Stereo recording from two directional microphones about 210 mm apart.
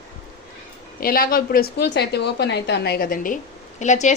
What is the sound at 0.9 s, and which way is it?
A woman's voice, 45° left (ahead or behind).